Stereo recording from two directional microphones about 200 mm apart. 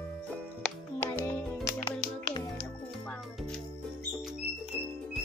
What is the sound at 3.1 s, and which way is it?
Music, 5° left (ahead or behind).